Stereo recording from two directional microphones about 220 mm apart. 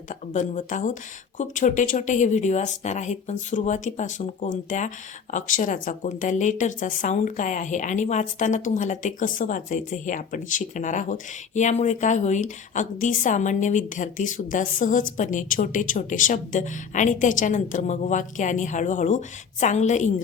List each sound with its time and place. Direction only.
0.1 s a woman's voice: 35° left (ahead or behind)